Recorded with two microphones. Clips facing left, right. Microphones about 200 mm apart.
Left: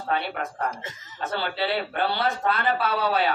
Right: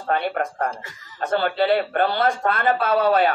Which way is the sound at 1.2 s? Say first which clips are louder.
Right 7 dB; 50° right (ahead or behind).